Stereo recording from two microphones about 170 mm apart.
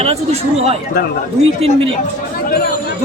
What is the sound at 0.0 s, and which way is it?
Speech, 35° right (ahead or behind).